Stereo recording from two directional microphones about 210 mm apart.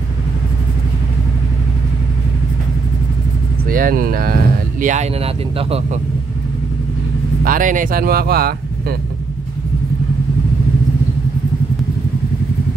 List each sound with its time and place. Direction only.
3.6 s speech: 40° right (ahead or behind)
7.4 s speech: 40° right (ahead or behind)